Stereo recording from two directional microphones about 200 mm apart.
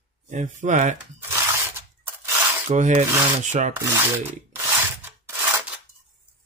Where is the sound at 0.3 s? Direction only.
40° right (ahead or behind).